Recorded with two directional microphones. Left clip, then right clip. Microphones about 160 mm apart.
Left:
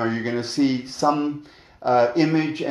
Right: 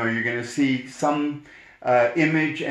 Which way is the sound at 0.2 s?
30° left (ahead or behind).